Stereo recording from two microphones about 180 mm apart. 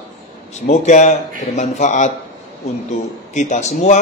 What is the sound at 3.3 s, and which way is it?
Speech, 40° left (ahead or behind).